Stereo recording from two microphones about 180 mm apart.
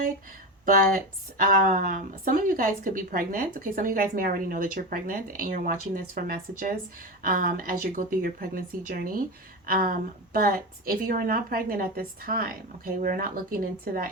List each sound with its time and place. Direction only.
0.6 s a woman's voice: 50° right (ahead or behind)